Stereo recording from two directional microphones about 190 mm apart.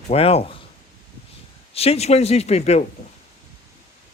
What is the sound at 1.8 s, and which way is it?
Speech, 35° left (ahead or behind).